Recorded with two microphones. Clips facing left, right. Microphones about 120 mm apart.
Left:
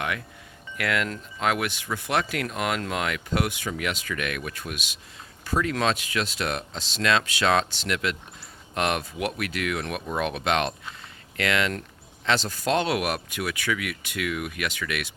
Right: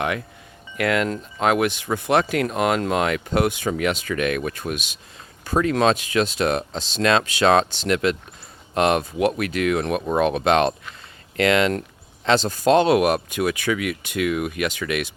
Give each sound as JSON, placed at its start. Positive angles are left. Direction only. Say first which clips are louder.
{"t": 0.8, "sound": "speech", "louder": "right 6 dB", "side_deg": -30}